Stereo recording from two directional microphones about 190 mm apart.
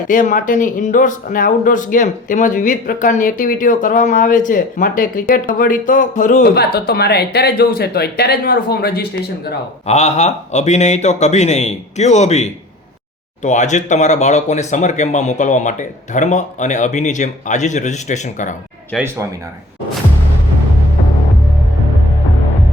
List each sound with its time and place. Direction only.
0.1 s speech: 45° left (ahead or behind)
6.5 s speech: 60° left (ahead or behind)
9.8 s speech: 35° left (ahead or behind)
18.9 s speech: centre (ahead or behind)